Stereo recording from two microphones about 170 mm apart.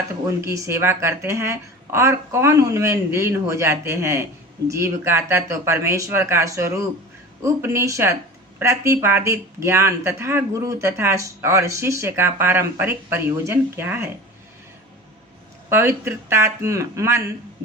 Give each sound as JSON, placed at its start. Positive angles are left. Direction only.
{"t": 0.3, "sound": "speech", "side_deg": -15}
{"t": 15.7, "sound": "speech", "side_deg": -15}